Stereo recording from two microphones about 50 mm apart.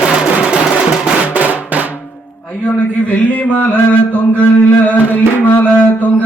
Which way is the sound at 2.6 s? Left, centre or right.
Left.